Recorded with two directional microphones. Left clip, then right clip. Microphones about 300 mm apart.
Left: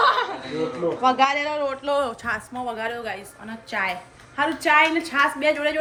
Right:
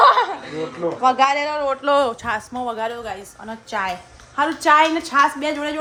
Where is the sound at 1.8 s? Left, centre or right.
Right.